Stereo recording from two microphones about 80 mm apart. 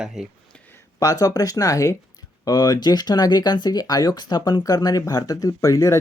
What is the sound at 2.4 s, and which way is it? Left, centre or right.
Speech, left.